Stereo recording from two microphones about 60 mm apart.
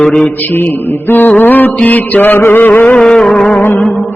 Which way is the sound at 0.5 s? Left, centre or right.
Left.